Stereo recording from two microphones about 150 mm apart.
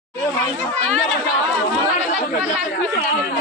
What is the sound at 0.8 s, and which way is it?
Speech, centre (ahead or behind).